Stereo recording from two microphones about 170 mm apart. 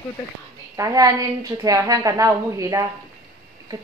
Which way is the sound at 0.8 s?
20° right (ahead or behind).